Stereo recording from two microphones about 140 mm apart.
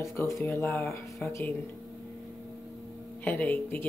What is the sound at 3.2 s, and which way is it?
Speech, 10° left (ahead or behind).